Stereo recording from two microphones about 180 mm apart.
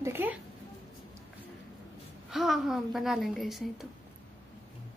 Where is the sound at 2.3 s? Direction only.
Centre (ahead or behind).